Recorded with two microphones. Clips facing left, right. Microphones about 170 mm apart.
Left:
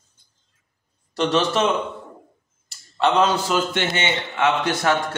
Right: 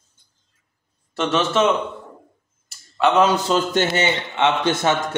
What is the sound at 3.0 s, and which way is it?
Speech, 5° right (ahead or behind).